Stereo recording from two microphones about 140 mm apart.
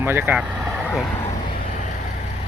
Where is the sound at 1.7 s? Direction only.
65° left (ahead or behind).